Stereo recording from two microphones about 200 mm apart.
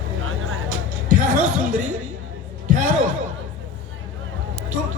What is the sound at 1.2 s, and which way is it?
Music, 40° right (ahead or behind).